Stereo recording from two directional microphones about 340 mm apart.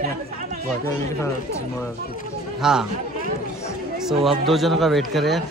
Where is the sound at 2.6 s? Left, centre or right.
Centre.